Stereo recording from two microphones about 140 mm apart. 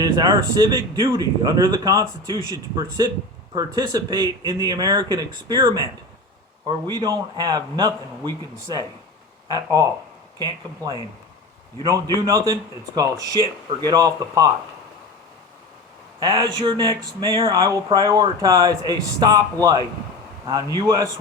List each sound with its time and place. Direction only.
0.0 s a man's voice: 30° right (ahead or behind)
12.2 s a man's voice: 25° right (ahead or behind)
16.2 s a man's voice: 30° right (ahead or behind)